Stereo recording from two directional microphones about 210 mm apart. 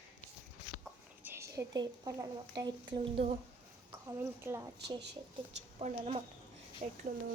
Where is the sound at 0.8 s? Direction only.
10° right (ahead or behind).